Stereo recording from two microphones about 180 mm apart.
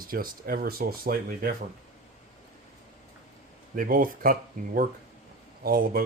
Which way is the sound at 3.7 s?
50° right (ahead or behind).